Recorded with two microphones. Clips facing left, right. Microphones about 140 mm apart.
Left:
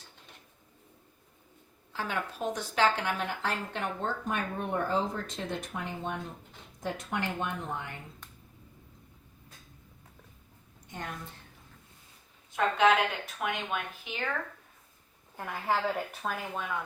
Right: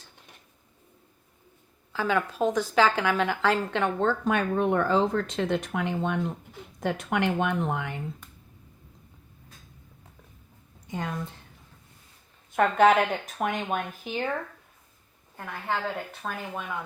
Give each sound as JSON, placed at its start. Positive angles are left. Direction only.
{"t": 2.0, "sound": "a woman's voice", "side_deg": -90}
{"t": 12.5, "sound": "speech", "side_deg": -50}
{"t": 15.4, "sound": "a woman's voice", "side_deg": 5}